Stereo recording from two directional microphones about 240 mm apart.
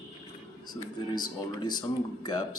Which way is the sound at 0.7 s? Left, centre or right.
Centre.